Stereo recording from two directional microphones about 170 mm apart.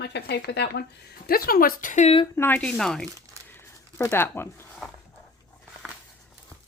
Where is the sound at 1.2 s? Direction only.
60° left (ahead or behind); by 2.3 s 40° left (ahead or behind).